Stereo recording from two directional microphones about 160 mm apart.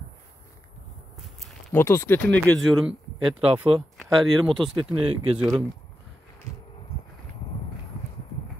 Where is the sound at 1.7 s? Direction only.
15° left (ahead or behind).